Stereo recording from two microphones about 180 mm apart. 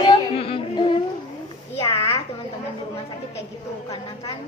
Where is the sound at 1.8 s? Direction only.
35° left (ahead or behind).